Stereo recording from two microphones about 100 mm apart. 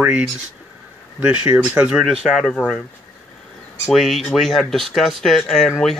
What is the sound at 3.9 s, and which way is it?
Speech, centre (ahead or behind).